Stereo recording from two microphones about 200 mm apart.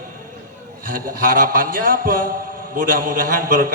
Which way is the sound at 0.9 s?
45° right (ahead or behind).